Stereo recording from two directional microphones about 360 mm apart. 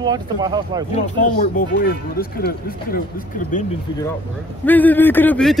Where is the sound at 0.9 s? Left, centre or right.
Left.